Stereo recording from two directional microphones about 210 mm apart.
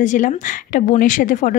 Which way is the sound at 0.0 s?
35° left (ahead or behind).